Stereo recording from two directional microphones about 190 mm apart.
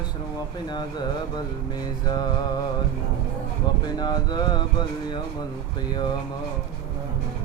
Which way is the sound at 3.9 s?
20° left (ahead or behind).